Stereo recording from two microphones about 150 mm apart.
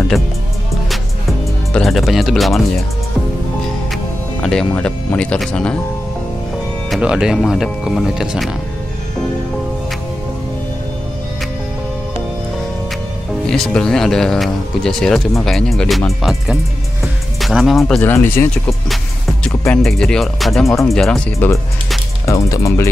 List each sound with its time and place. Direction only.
1.7 s speech: centre (ahead or behind)
3.9 s speech: 5° left (ahead or behind)
6.9 s speech: 5° right (ahead or behind)
13.5 s speech: 5° left (ahead or behind)
18.1 s speech: 15° left (ahead or behind)
18.5 s speech: centre (ahead or behind); by 22.8 s 20° left (ahead or behind)